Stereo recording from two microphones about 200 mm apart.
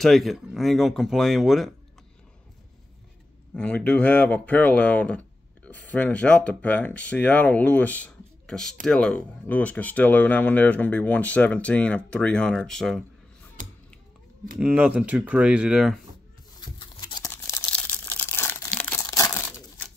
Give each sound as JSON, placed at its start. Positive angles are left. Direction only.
{"t": 0.0, "sound": "speech", "side_deg": 0}
{"t": 3.5, "sound": "speech", "side_deg": 5}
{"t": 13.6, "sound": "a sound", "side_deg": -45}
{"t": 14.6, "sound": "speech", "side_deg": -5}
{"t": 16.5, "sound": "a sound", "side_deg": 20}
{"t": 17.3, "sound": "crumpling", "side_deg": 10}